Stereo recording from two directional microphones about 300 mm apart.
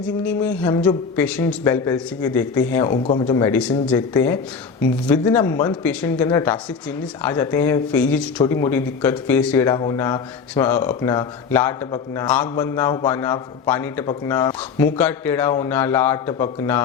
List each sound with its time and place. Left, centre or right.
0.3 s a man's voice: centre